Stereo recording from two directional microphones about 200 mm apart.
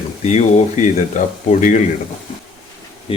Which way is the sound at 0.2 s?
35° left (ahead or behind).